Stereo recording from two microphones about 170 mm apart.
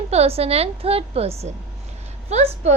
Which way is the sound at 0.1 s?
35° right (ahead or behind).